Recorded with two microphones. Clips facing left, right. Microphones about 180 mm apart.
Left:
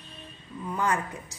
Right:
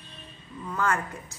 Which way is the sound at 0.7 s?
15° left (ahead or behind).